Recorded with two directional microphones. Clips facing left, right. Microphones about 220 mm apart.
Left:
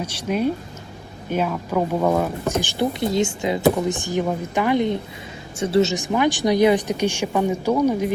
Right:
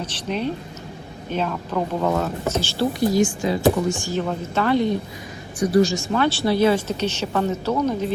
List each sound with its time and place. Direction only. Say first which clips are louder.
0.0 s a woman's voice: left 3 dB; 10° left (ahead or behind)